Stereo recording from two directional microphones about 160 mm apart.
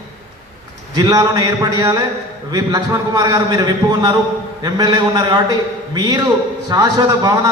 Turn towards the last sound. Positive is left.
turn(degrees=-25)  # may be behind; listen again after turning